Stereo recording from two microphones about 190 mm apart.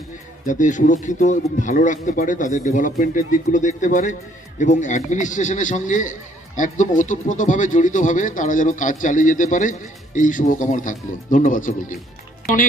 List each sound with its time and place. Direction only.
0.4 s speech: 40° left (ahead or behind)